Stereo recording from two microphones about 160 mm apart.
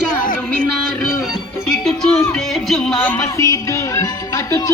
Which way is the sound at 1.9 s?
5° left (ahead or behind).